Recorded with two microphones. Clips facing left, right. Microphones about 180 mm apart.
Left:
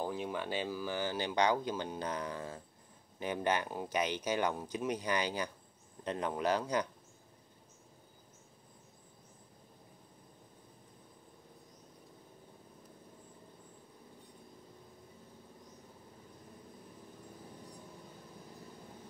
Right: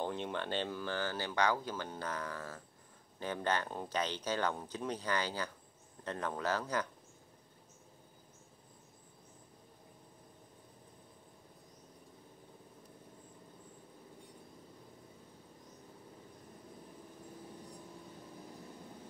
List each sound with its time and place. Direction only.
0.0 s speech: 5° left (ahead or behind)